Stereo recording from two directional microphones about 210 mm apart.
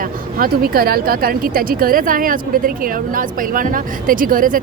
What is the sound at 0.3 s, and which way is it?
Speech, 45° right (ahead or behind).